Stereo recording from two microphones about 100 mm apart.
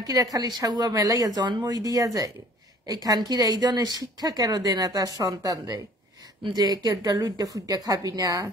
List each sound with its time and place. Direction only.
0.0 s speech: 35° right (ahead or behind)
1.9 s speech: 35° right (ahead or behind)